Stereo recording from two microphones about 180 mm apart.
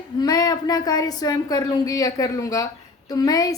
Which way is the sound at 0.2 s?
20° left (ahead or behind).